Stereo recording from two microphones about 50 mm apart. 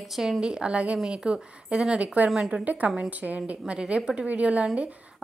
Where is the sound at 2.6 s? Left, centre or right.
Right.